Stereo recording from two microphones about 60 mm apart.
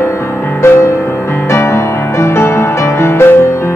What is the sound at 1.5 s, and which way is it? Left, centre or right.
Music, left.